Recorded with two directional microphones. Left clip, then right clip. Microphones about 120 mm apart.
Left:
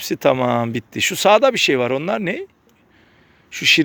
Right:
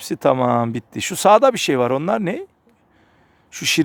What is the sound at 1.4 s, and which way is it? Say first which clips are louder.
Speech: even; 35° right (ahead or behind).